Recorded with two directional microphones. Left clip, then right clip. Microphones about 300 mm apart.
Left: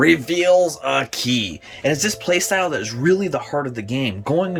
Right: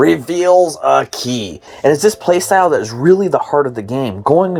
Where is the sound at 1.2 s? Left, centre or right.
Centre.